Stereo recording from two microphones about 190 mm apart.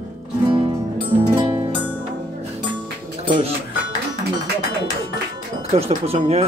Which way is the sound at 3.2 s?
25° right (ahead or behind).